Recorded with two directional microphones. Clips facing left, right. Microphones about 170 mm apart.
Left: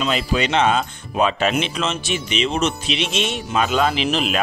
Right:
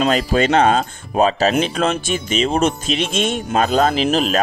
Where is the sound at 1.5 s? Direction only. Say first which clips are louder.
Right 5 dB; 50° right (ahead or behind).